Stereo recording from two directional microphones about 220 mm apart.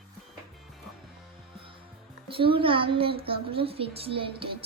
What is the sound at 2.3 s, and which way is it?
A woman's voice, 25° right (ahead or behind).